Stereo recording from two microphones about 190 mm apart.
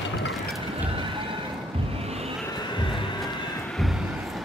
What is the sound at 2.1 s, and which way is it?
Vehicle, 35° right (ahead or behind).